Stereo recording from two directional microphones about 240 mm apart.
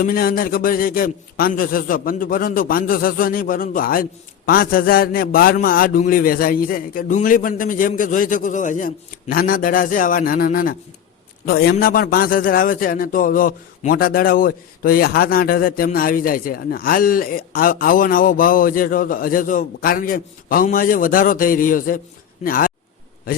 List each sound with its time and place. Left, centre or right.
0.0 s a man's voice: left